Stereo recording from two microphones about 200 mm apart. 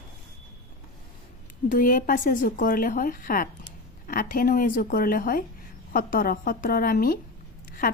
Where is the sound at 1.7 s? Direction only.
40° left (ahead or behind).